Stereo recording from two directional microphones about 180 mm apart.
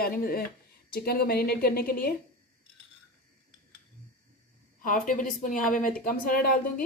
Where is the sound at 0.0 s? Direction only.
55° left (ahead or behind).